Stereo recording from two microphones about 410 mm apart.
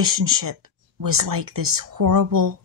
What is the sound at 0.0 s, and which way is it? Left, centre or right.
Speech, right.